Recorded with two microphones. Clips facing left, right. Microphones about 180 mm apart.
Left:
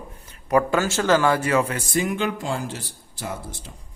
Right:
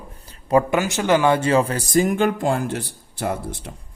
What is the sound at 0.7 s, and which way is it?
Speech, 15° right (ahead or behind).